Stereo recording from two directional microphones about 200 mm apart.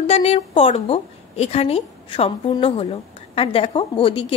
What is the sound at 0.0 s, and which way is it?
A woman's voice, 30° left (ahead or behind).